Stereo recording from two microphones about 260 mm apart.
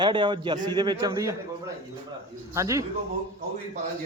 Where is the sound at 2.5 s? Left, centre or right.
Centre.